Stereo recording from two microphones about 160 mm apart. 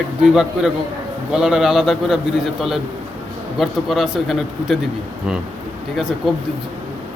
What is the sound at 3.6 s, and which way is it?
A man's voice, centre (ahead or behind).